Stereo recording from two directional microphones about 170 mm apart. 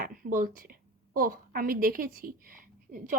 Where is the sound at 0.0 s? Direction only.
55° right (ahead or behind).